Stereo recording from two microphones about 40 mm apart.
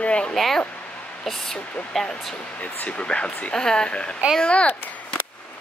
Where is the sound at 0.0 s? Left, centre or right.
Left.